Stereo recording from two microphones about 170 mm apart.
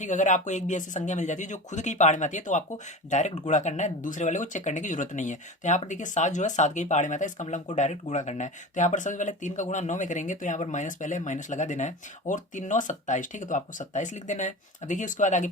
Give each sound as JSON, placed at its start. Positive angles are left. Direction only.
{"t": 0.0, "sound": "speech", "side_deg": 45}